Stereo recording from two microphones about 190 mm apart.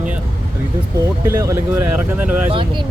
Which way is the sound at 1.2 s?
15° right (ahead or behind).